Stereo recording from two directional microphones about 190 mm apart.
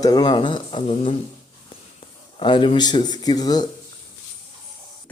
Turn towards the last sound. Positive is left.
turn(degrees=20)  # may be behind; listen again after turning